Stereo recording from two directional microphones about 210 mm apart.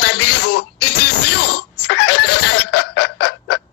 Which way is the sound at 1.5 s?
60° left (ahead or behind).